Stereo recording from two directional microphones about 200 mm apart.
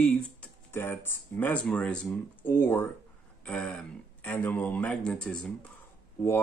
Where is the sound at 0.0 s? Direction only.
10° left (ahead or behind).